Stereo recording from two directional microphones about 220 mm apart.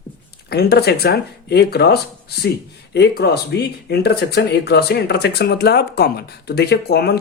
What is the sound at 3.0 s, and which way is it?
Speech, 45° left (ahead or behind).